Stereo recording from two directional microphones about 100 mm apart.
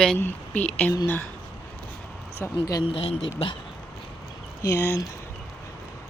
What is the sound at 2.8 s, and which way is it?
Speech, 75° left (ahead or behind).